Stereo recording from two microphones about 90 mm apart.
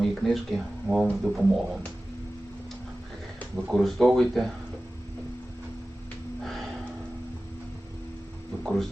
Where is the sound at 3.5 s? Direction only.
5° left (ahead or behind).